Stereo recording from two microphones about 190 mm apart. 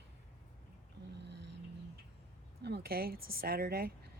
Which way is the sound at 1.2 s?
65° right (ahead or behind).